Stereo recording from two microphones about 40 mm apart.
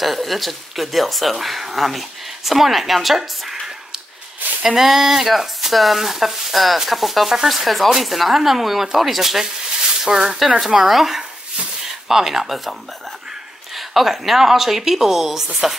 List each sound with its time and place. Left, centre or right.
0.0 s speech: centre
4.4 s a sound: right
4.7 s speech: centre
10.0 s speech: centre
13.7 s speech: centre